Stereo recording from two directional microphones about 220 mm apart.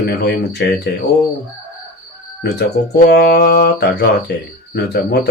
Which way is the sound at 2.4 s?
45° left (ahead or behind).